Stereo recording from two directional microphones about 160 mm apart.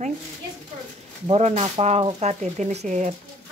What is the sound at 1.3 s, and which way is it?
Speech, 40° right (ahead or behind).